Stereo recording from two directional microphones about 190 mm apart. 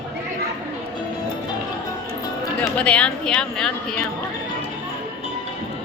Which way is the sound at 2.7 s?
5° left (ahead or behind).